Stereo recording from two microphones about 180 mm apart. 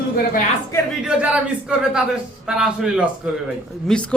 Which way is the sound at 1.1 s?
5° right (ahead or behind).